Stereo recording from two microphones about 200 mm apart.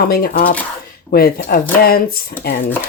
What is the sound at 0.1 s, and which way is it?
Speech, 50° left (ahead or behind).